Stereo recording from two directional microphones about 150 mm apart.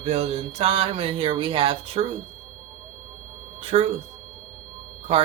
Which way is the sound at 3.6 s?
40° right (ahead or behind).